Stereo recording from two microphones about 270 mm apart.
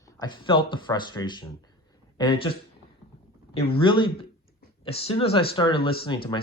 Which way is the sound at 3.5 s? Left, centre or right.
Centre.